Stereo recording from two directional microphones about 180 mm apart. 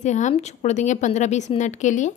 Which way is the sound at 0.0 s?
40° left (ahead or behind).